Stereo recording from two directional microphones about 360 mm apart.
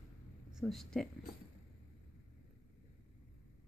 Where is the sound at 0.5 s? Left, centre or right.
Centre.